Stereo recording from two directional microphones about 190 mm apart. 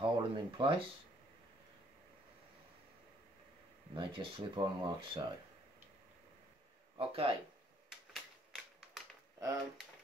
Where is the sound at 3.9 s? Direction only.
25° right (ahead or behind).